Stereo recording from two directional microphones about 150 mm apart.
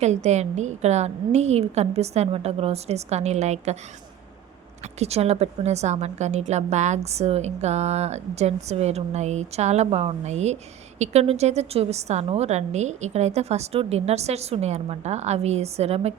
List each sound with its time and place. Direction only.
0.0 s a woman's voice: 50° right (ahead or behind)
4.9 s a woman's voice: 45° right (ahead or behind)